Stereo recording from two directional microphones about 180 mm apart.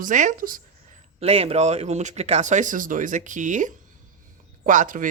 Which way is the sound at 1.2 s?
35° right (ahead or behind).